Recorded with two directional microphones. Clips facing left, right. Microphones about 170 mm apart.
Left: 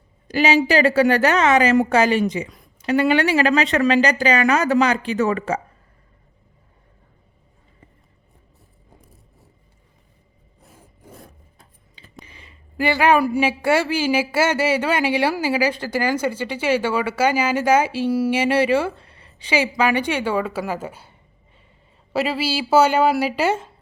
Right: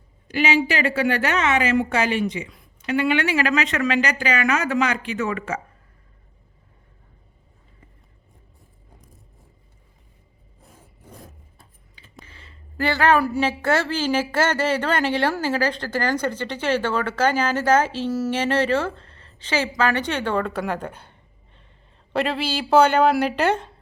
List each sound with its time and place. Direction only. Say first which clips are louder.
0.3 s a woman's voice: left 4 dB; 35° left (ahead or behind)
11.0 s vehicle: left 1 dB; centre (ahead or behind)
12.2 s speech: right 2 dB; 15° left (ahead or behind)